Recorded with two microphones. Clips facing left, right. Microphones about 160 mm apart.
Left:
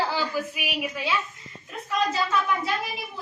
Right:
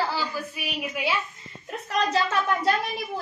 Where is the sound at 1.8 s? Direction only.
90° right.